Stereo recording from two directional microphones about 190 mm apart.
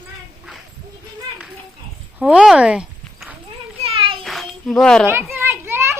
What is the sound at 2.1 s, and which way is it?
Clip-clop, 5° right (ahead or behind).